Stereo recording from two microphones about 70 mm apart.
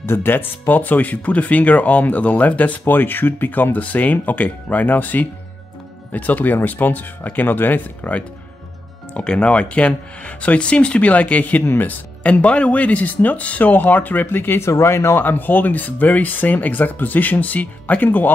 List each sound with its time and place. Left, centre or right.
0.0 s speech: left
9.1 s speech: centre; by 14.7 s left
14.7 s speech: left
15.2 s speech: left